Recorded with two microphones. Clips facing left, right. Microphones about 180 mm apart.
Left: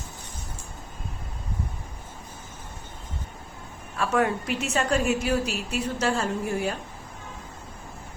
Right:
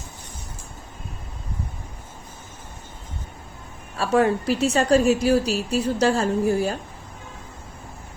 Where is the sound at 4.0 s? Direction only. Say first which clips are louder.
Right 5 dB; 30° right (ahead or behind).